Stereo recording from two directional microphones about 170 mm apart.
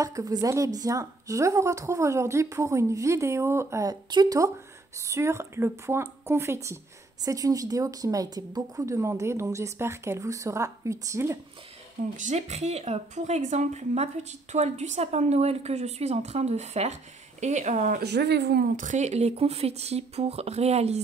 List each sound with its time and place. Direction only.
0.0 s a woman's voice: 20° right (ahead or behind)
12.2 s speech: 45° right (ahead or behind)
18.0 s speech: 80° right
18.8 s speech: 45° right (ahead or behind)